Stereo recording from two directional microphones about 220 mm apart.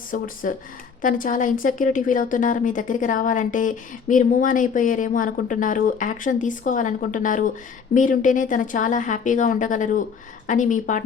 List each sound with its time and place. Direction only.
0.1 s a woman's voice: 35° left (ahead or behind)